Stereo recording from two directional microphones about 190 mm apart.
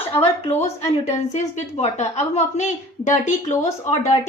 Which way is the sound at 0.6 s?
35° left (ahead or behind).